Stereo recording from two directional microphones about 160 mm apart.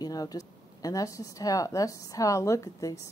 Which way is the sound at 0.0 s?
25° left (ahead or behind).